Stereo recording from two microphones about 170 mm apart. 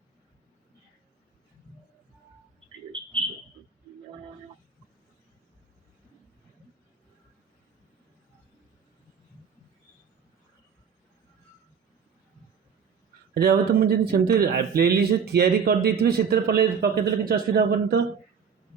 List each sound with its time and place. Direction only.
13.3 s speech: 70° right (ahead or behind)